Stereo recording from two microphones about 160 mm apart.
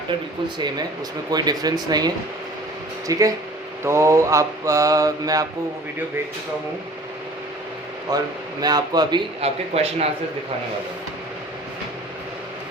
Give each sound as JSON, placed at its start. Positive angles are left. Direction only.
{"t": 0.4, "sound": "mantra", "side_deg": -25}
{"t": 8.6, "sound": "mantra", "side_deg": -25}